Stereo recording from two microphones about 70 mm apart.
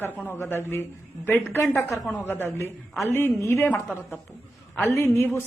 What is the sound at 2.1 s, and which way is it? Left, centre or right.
A woman's voice, left.